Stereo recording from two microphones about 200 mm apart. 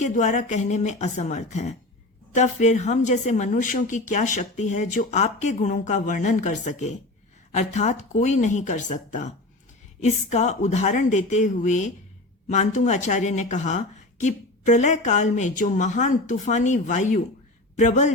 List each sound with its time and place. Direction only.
0.0 s speech: 40° left (ahead or behind)